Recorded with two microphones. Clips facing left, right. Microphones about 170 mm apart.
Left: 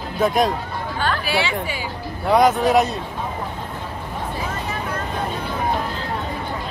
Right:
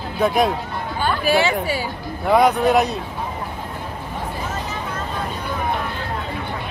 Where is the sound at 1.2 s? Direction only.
45° right (ahead or behind).